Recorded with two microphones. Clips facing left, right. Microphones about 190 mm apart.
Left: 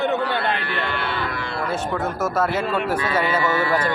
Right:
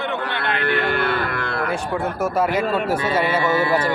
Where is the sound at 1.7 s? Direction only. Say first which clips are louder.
Right 1 dB; 10° right (ahead or behind).